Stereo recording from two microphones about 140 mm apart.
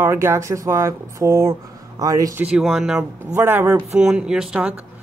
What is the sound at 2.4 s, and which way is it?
Speech, 5° right (ahead or behind).